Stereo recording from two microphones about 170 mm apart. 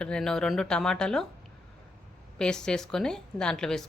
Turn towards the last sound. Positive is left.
turn(degrees=5)  # may be behind; listen again after turning